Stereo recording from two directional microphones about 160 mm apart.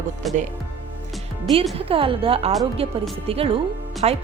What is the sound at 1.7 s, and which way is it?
A woman's voice, 35° right (ahead or behind).